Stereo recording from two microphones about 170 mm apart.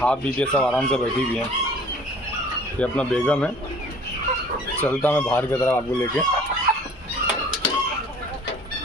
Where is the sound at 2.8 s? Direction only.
5° left (ahead or behind).